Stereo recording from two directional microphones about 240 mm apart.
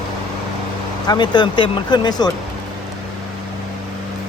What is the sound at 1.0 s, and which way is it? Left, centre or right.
Speech, centre.